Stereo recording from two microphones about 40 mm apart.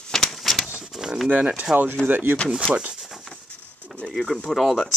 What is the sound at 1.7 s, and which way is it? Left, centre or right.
Speech, centre.